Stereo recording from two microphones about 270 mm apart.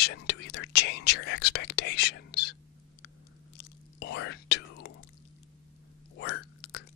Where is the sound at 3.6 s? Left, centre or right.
Left.